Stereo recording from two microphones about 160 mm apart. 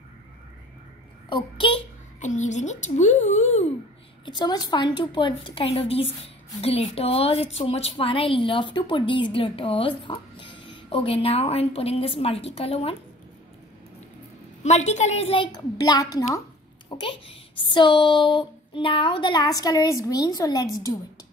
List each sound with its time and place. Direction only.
1.3 s a woman's voice: 30° left (ahead or behind)
2.1 s speech: 50° left (ahead or behind)
4.3 s a sound: 25° left (ahead or behind)
6.6 s a woman's voice: 40° left (ahead or behind)
14.6 s a woman's voice: 45° left (ahead or behind); by 16.3 s 20° left (ahead or behind)
17.0 s a sound: 35° left (ahead or behind)